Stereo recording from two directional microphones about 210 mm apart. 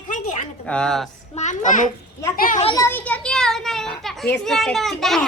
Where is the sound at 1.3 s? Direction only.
35° left (ahead or behind).